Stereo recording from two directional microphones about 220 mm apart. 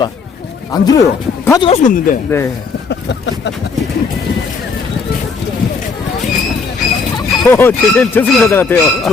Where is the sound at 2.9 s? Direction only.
55° left (ahead or behind).